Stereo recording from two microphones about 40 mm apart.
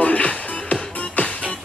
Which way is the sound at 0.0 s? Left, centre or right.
Left.